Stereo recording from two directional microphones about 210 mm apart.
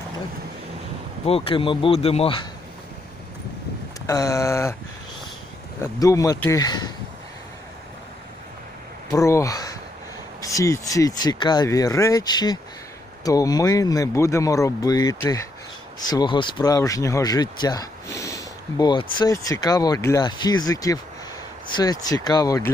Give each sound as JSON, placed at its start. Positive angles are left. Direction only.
{"t": 1.2, "sound": "speech", "side_deg": 25}
{"t": 4.0, "sound": "speech", "side_deg": 15}
{"t": 5.8, "sound": "speech", "side_deg": 15}
{"t": 9.1, "sound": "speech", "side_deg": 15}